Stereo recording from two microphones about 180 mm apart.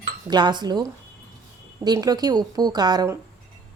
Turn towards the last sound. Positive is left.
turn(degrees=-20)  # may be behind; listen again after turning